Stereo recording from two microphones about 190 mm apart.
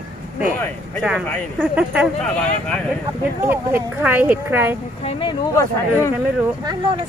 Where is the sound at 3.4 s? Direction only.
10° right (ahead or behind).